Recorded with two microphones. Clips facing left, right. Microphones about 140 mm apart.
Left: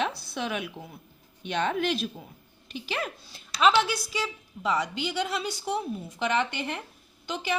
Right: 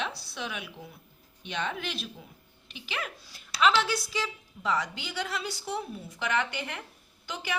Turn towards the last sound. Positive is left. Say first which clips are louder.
# left 4 dB
turn(degrees=20)  # may be behind; listen again after turning